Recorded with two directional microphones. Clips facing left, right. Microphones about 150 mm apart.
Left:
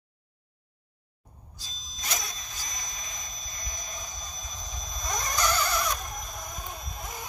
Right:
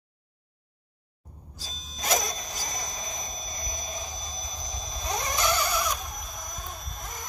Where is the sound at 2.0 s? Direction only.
45° right (ahead or behind).